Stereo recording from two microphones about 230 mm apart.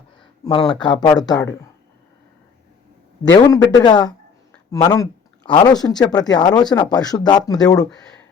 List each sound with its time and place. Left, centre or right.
0.7 s speech: centre
3.3 s speech: centre